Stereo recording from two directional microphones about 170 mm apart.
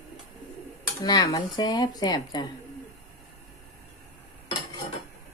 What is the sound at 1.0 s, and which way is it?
Speech, 20° left (ahead or behind).